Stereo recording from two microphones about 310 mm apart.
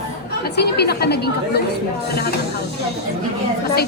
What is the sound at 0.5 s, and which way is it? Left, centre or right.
Speech, left.